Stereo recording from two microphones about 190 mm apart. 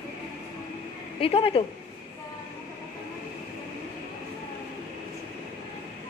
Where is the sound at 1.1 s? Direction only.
30° left (ahead or behind).